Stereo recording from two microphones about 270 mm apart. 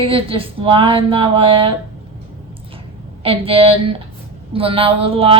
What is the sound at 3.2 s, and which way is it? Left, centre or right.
Speech, right.